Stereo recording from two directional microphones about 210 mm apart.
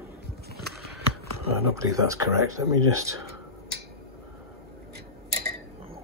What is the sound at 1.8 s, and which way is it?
Speech, 15° right (ahead or behind).